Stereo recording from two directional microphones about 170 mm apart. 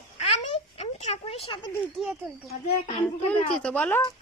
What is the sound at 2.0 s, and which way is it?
Speech, centre (ahead or behind).